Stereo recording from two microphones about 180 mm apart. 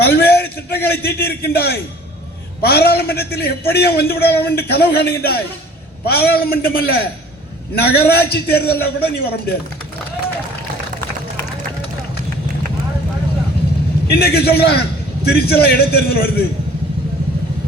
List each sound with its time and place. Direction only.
0.0 s a sound: 60° left (ahead or behind)
0.7 s a man's voice: 60° left (ahead or behind)
14.1 s a man's voice: 60° left (ahead or behind)